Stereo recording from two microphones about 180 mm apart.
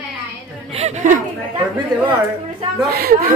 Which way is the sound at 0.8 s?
40° right (ahead or behind).